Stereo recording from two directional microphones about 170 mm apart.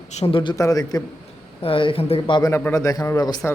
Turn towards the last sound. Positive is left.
turn(degrees=20)  # may be behind; listen again after turning